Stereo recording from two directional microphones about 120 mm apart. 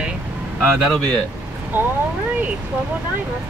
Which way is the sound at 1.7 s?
15° right (ahead or behind).